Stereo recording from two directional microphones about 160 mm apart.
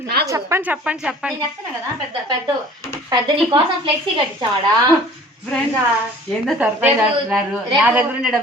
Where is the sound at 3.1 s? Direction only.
30° right (ahead or behind).